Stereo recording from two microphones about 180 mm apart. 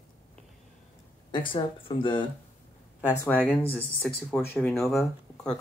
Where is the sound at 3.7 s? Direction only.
10° left (ahead or behind).